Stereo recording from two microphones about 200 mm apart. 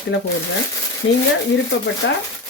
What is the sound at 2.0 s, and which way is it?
Speech, 60° left (ahead or behind).